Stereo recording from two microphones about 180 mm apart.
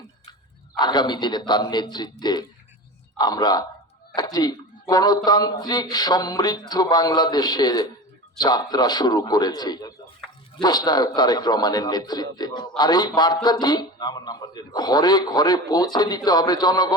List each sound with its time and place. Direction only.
0.8 s a man's voice: 25° left (ahead or behind)